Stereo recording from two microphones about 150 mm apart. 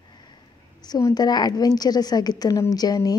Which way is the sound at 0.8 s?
25° left (ahead or behind).